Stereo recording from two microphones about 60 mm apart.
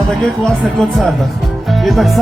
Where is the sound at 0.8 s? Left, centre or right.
Centre.